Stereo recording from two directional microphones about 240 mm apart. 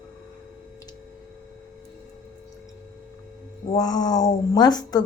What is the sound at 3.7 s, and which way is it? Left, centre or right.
Speech, centre.